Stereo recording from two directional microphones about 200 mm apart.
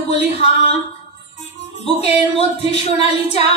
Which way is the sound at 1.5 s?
30° left (ahead or behind).